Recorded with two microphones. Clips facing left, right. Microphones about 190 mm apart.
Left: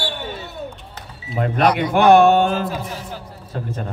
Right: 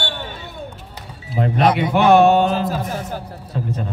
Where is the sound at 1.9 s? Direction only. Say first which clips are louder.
Left 1 dB; 50° left (ahead or behind).